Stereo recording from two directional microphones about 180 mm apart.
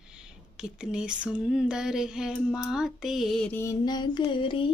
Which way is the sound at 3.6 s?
20° left (ahead or behind).